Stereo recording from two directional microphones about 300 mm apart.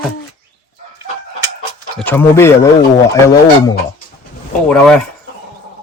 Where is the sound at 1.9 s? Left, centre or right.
Centre.